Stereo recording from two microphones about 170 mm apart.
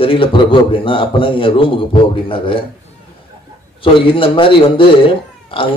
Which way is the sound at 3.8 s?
30° left (ahead or behind).